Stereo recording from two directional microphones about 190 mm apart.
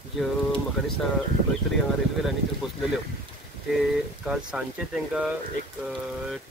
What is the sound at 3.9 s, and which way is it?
Speech, 5° right (ahead or behind).